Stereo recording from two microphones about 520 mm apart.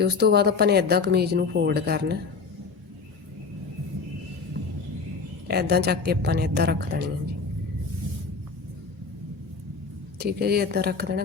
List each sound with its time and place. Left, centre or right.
0.0 s a woman's voice: centre
5.5 s a woman's voice: centre
10.2 s speech: centre